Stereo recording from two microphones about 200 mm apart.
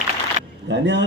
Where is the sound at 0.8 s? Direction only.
60° right (ahead or behind).